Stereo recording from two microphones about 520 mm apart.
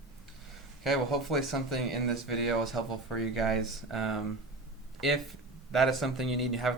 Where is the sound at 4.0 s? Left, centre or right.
Left.